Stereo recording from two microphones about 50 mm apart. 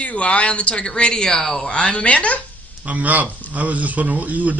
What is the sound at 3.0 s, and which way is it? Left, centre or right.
Speech, right.